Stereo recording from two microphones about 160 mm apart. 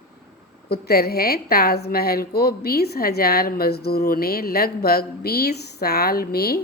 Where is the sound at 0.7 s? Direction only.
75° left (ahead or behind).